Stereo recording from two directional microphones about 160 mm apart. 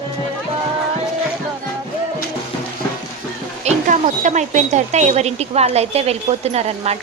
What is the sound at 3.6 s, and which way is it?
Speech, 45° right (ahead or behind).